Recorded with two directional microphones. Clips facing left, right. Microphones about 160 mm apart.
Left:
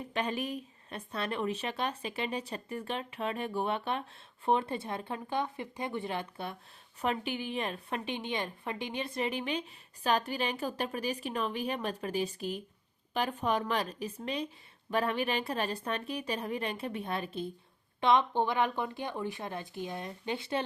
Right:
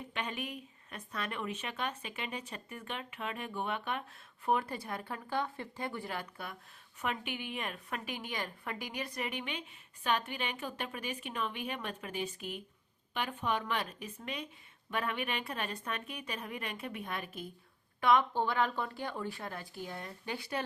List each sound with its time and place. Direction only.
0.1 s a woman's voice: 35° left (ahead or behind)